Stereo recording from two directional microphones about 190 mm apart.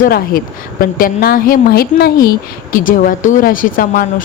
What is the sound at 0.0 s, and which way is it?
A woman's voice, 50° left (ahead or behind).